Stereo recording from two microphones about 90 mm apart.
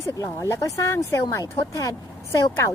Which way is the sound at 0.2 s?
35° left (ahead or behind).